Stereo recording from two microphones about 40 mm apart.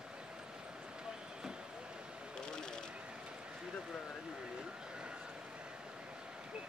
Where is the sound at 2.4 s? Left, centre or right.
Centre.